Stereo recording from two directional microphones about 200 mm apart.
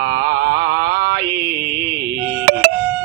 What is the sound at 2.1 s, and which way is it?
Music, 15° right (ahead or behind).